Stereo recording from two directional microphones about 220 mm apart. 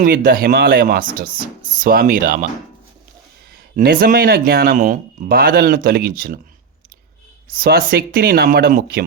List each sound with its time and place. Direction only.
0.0 s speech: 40° right (ahead or behind)
3.8 s speech: 40° right (ahead or behind)
7.5 s speech: 40° right (ahead or behind)